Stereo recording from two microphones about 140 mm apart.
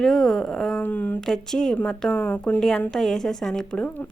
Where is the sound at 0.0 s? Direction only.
Centre (ahead or behind).